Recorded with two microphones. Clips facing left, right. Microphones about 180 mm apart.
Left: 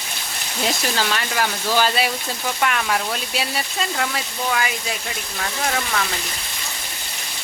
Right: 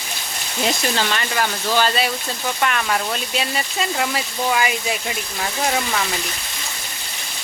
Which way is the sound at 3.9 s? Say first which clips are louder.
Right 2 dB; 10° right (ahead or behind).